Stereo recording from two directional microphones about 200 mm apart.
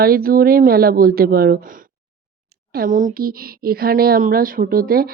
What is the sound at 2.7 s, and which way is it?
Speech, 40° right (ahead or behind).